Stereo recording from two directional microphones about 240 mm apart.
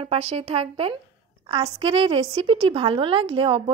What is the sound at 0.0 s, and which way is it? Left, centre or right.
A woman's voice, right.